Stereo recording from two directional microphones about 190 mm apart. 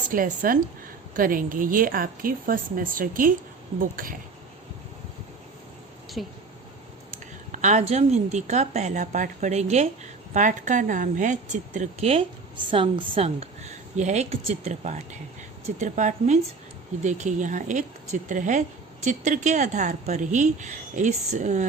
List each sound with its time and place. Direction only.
0.1 s a woman's voice: 45° right (ahead or behind)
6.2 s a woman's voice: centre (ahead or behind)
7.5 s a woman's voice: 40° right (ahead or behind)